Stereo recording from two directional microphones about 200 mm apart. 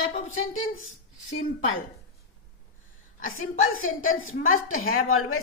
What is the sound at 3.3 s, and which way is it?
Speech, 90° left.